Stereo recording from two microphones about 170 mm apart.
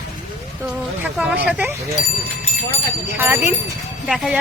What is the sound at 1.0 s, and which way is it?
Speech, 10° right (ahead or behind).